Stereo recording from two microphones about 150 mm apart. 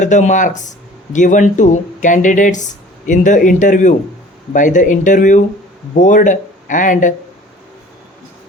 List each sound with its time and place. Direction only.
0.0 s speech: 55° left (ahead or behind)